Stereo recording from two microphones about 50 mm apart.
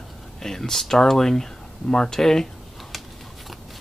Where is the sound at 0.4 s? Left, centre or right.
Centre.